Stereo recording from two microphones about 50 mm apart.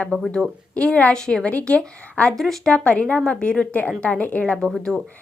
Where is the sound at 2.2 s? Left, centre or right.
Centre.